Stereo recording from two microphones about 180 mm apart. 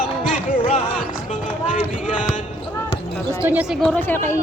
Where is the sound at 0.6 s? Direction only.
30° left (ahead or behind).